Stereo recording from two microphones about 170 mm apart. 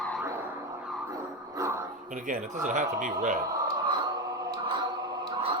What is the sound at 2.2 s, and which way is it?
Speech, 50° right (ahead or behind).